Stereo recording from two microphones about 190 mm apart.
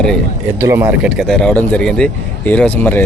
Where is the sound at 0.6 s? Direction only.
15° right (ahead or behind).